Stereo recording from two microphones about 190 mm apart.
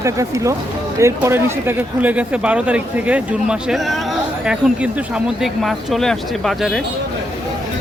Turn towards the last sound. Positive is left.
turn(degrees=0)  # may be behind; listen again after turning